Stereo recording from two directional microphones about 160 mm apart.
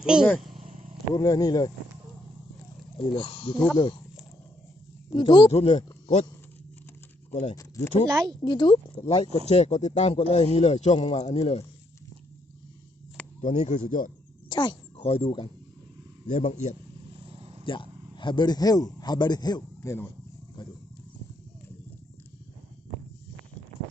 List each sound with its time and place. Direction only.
0.0 s speech: 5° right (ahead or behind)
0.5 s vehicle: 45° right (ahead or behind)
1.1 s speech: 20° left (ahead or behind)
3.0 s speech: 35° left (ahead or behind)
5.1 s speech: 30° left (ahead or behind)
8.0 s speech: 25° right (ahead or behind)
8.4 s speech: 30° left (ahead or behind)
13.4 s speech: 45° left (ahead or behind)
14.5 s speech: 30° left (ahead or behind)
16.2 s speech: 50° left (ahead or behind)
17.2 s vehicle: 35° right (ahead or behind)
17.7 s a man's voice: 30° left (ahead or behind)